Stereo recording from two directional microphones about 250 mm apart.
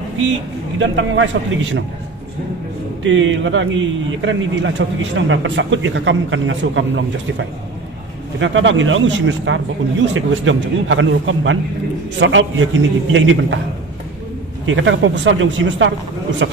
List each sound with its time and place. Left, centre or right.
0.2 s a man's voice: right
3.0 s a man's voice: right
14.7 s a man's voice: right